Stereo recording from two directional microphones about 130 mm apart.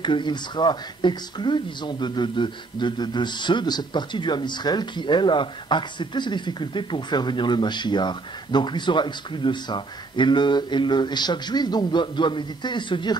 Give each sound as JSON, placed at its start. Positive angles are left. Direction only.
{"t": 0.0, "sound": "speech", "side_deg": 35}